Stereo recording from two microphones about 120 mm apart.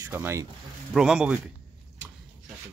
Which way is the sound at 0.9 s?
5° right (ahead or behind).